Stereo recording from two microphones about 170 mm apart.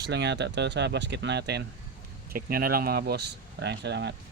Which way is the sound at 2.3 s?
60° right (ahead or behind).